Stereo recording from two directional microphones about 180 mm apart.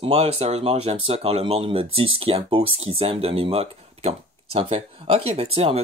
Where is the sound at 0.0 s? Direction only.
35° right (ahead or behind).